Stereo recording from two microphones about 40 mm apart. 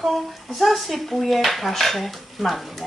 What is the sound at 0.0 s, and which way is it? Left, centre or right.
Speech, centre.